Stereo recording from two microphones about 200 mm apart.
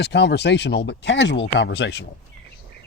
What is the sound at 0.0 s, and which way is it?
Speech, 60° left (ahead or behind).